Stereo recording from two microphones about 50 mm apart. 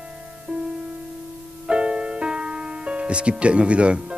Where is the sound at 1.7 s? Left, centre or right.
Centre.